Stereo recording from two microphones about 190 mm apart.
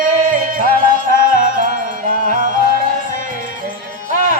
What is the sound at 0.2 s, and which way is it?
Music, 45° right (ahead or behind).